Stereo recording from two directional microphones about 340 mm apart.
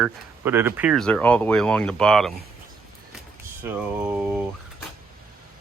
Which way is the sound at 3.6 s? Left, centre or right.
Centre.